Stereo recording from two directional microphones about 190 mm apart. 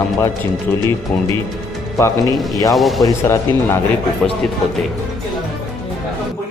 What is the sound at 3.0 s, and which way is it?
Speech, 15° left (ahead or behind).